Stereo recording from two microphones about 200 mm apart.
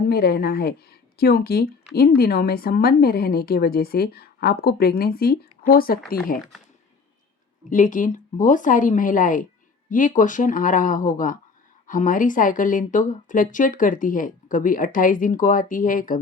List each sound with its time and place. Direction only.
0.1 s a woman's voice: 50° left (ahead or behind)
7.7 s speech: 40° left (ahead or behind)